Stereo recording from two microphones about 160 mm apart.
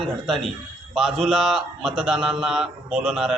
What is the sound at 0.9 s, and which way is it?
A man's voice, centre (ahead or behind).